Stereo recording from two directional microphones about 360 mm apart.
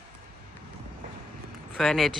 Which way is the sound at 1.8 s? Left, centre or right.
Centre.